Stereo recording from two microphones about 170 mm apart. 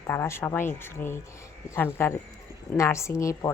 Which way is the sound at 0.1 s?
15° left (ahead or behind).